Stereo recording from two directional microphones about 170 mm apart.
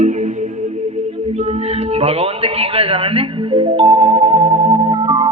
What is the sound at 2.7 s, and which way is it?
A man's voice, 35° right (ahead or behind).